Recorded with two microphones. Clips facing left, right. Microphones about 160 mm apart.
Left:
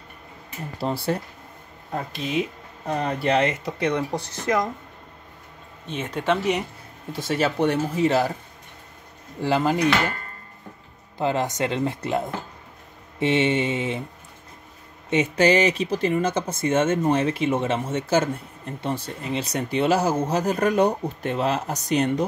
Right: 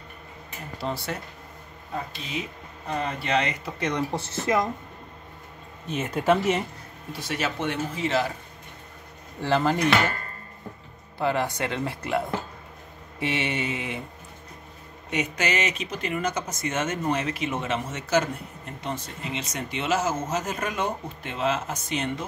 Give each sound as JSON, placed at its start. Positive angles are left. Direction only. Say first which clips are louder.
{"t": 0.7, "sound": "speech", "louder": "left 6 dB", "side_deg": 30}
{"t": 3.4, "sound": "speech", "louder": "left 5 dB", "side_deg": 20}
{"t": 3.9, "sound": "speech", "louder": "left 2 dB", "side_deg": -5}
{"t": 5.9, "sound": "speech", "louder": "right 1 dB", "side_deg": -5}
{"t": 7.1, "sound": "speech", "louder": "left 6 dB", "side_deg": 25}
{"t": 9.4, "sound": "speech", "louder": "left 2 dB", "side_deg": 15}
{"t": 11.1, "sound": "speech", "louder": "left 2 dB", "side_deg": 20}
{"t": 15.0, "sound": "speech", "louder": "left 8 dB", "side_deg": 30}